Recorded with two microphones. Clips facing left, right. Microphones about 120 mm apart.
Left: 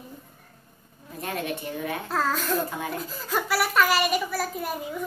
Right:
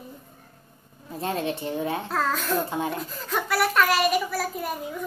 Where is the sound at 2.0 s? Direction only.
Centre (ahead or behind).